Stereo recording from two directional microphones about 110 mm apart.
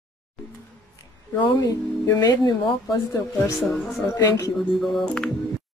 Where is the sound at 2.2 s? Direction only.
40° left (ahead or behind).